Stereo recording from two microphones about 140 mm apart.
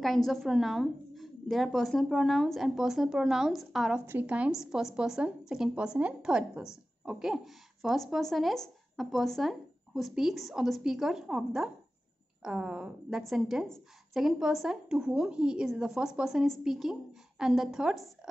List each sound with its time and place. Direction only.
0.0 s speech: centre (ahead or behind)
4.0 s a woman's voice: 15° right (ahead or behind)